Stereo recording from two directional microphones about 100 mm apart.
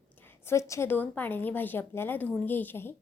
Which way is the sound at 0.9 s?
20° left (ahead or behind).